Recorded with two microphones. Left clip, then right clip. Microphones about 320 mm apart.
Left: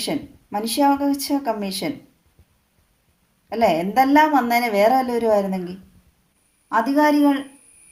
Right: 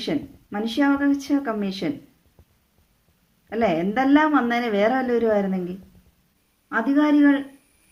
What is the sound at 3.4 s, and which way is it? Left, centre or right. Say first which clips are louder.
A woman's voice: left 3 dB; left.